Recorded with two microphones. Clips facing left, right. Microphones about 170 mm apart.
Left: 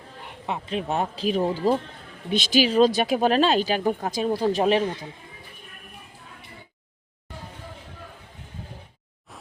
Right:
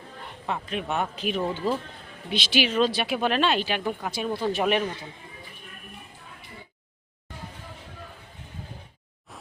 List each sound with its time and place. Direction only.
0.4 s speech: 20° left (ahead or behind)